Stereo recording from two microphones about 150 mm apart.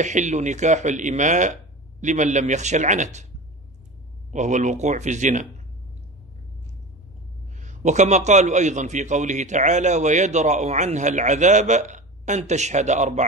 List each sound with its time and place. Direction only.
0.0 s a man's voice: 50° right (ahead or behind)
4.3 s a man's voice: 55° right (ahead or behind)
7.6 s a man's voice: 55° right (ahead or behind)